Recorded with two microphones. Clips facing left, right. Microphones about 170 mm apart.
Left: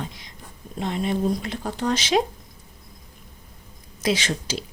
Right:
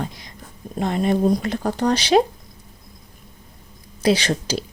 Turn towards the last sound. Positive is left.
turn(degrees=-35)  # may be behind; listen again after turning